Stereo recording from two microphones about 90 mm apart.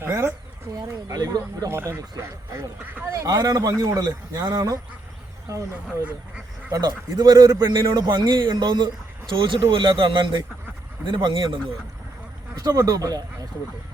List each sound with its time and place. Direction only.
0.0 s speech: 30° right (ahead or behind)
0.8 s a man's voice: 45° right (ahead or behind)
1.7 s speech: 30° right (ahead or behind)
3.1 s a man's voice: 40° right (ahead or behind)
6.7 s a man's voice: 45° right (ahead or behind)
7.7 s a man's voice: 55° right (ahead or behind)
12.5 s speech: 45° right (ahead or behind)